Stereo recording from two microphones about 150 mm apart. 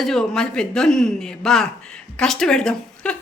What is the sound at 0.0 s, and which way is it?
A woman's voice, 5° left (ahead or behind).